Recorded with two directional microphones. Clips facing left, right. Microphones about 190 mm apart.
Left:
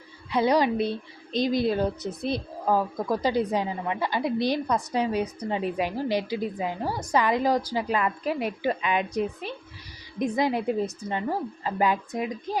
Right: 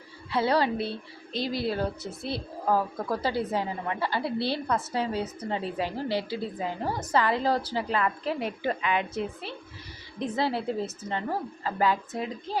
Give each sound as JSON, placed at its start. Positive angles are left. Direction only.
{"t": 0.3, "sound": "a woman's voice", "side_deg": 15}